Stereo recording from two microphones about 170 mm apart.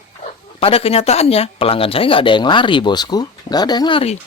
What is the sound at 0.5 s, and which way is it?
Speech, 35° left (ahead or behind).